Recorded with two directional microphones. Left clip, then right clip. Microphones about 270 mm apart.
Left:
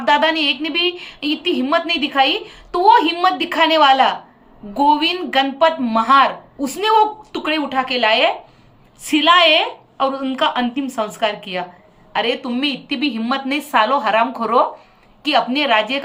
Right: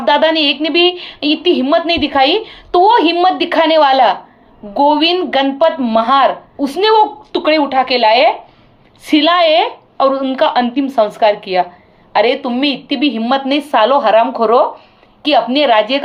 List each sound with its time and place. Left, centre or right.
0.0 s speech: centre
1.3 s speech: right
1.5 s speech: centre
12.6 s speech: right
13.1 s speech: centre